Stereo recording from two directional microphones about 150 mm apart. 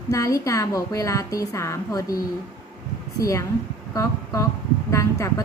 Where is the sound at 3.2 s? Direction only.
20° left (ahead or behind).